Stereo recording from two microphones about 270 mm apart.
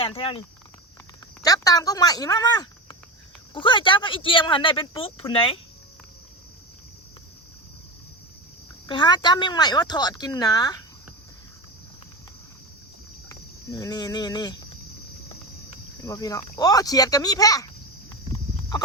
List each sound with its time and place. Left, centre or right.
0.0 s speech: centre
8.9 s speech: centre
13.2 s speech: centre
16.0 s speech: centre
18.1 s horse: centre